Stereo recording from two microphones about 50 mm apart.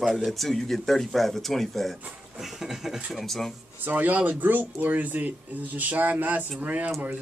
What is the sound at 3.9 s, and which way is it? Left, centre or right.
Speech, right.